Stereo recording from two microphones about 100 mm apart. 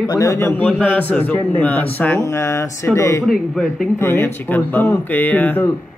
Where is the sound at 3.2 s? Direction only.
Centre (ahead or behind).